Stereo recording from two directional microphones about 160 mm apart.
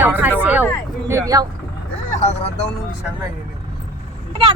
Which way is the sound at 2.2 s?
40° left (ahead or behind).